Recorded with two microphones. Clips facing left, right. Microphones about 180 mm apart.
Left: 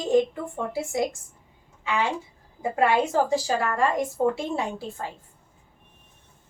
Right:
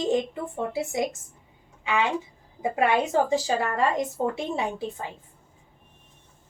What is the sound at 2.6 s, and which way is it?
Speech, 20° right (ahead or behind).